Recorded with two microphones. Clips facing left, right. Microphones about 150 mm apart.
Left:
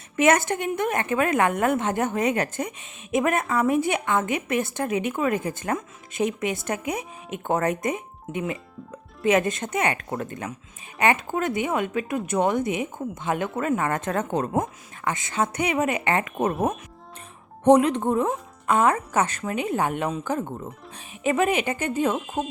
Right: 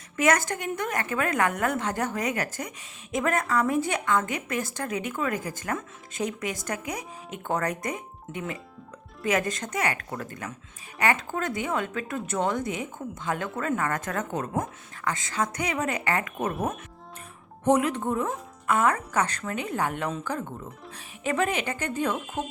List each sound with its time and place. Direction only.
0.2 s a woman's voice: 25° left (ahead or behind)
18.0 s a woman's voice: 25° left (ahead or behind)
21.2 s speech: 15° left (ahead or behind)